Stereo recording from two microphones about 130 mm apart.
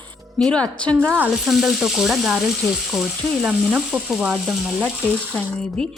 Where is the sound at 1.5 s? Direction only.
5° right (ahead or behind).